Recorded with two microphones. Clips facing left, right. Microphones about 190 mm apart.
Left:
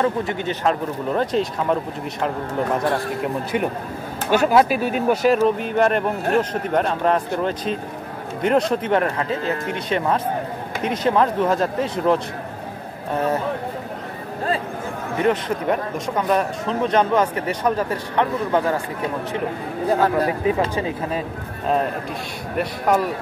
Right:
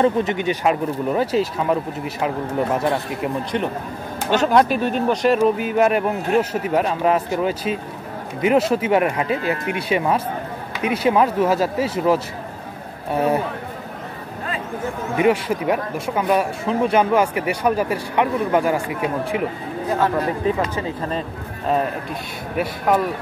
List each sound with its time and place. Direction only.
0.0 s speech: 20° right (ahead or behind)
3.5 s speech: 10° left (ahead or behind); by 13.4 s 10° right (ahead or behind)
15.1 s speech: 10° right (ahead or behind)
20.7 s speech: 15° left (ahead or behind)
22.6 s speech: 5° right (ahead or behind)